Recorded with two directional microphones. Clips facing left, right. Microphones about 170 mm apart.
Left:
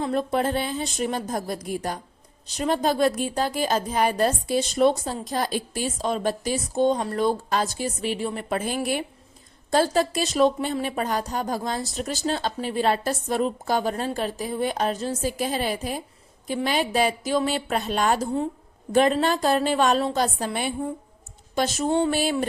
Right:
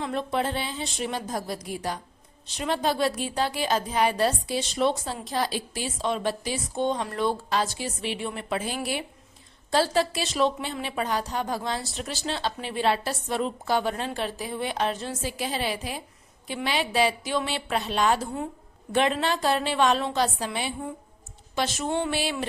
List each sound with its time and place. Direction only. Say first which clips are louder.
0.0 s a woman's voice: left 4 dB; 40° left (ahead or behind)
22.1 s a woman's voice: left 5 dB; 45° left (ahead or behind)